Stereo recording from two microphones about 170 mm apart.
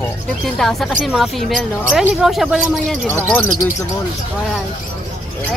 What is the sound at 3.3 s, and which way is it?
Speech, 10° left (ahead or behind).